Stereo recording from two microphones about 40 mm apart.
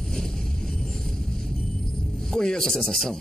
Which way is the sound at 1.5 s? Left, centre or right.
Centre.